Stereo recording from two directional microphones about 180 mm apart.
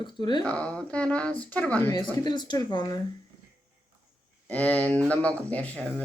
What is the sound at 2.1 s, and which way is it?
Speech, 25° left (ahead or behind).